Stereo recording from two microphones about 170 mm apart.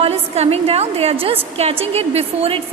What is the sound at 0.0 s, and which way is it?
A woman's voice, 35° right (ahead or behind).